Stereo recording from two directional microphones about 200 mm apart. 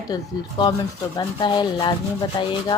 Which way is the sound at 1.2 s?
20° left (ahead or behind).